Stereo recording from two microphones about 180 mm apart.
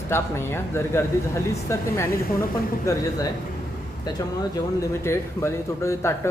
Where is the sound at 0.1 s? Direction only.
15° left (ahead or behind).